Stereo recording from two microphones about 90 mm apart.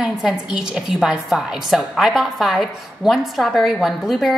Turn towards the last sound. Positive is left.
turn(degrees=0)  # may be behind; listen again after turning